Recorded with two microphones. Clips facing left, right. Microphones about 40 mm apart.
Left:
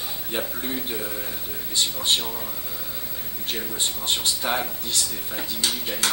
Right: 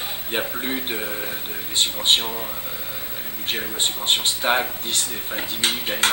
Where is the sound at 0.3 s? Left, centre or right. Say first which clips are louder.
Right 4 dB; right.